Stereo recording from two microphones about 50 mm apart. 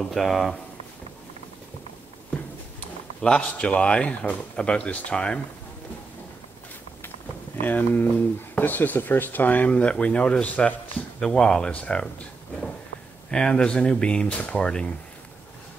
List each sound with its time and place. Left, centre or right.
0.0 s speech: centre
3.2 s a man's voice: centre
7.6 s speech: left
11.1 s speech: centre